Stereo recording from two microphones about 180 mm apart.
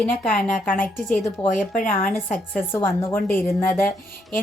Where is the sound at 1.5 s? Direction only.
45° left (ahead or behind).